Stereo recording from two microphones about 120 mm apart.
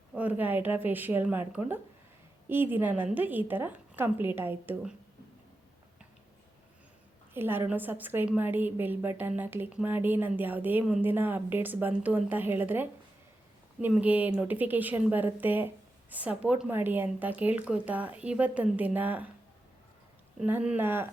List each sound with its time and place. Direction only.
0.2 s speech: 15° right (ahead or behind)
7.3 s speech: 20° right (ahead or behind)
13.9 s speech: 10° right (ahead or behind)
20.4 s speech: 10° right (ahead or behind)